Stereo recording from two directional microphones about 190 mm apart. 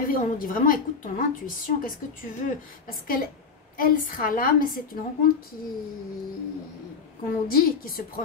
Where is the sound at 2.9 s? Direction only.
50° left (ahead or behind).